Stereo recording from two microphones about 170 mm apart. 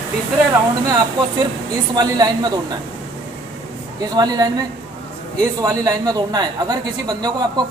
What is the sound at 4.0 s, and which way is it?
A man's voice, 25° right (ahead or behind).